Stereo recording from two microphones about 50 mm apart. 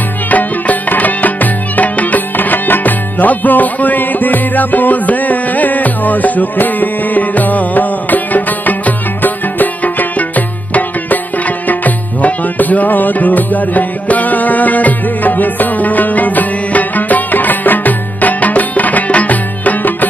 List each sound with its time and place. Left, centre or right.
0.3 s music: left